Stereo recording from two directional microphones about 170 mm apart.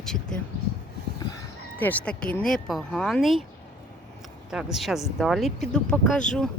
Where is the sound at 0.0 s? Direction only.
5° left (ahead or behind).